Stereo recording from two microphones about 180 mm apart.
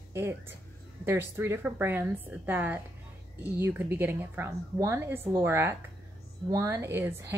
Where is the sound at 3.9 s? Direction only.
10° right (ahead or behind).